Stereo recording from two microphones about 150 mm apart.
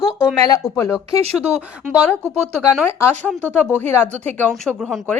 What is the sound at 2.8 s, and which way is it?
A woman's voice, 15° left (ahead or behind).